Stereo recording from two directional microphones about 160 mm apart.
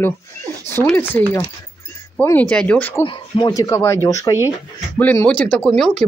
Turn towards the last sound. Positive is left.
turn(degrees=0)  # may be behind; listen again after turning